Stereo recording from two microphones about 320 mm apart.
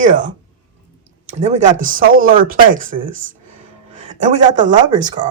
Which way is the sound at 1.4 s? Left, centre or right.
Right.